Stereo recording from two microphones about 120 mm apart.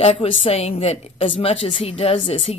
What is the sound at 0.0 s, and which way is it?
A woman's voice, 55° left (ahead or behind).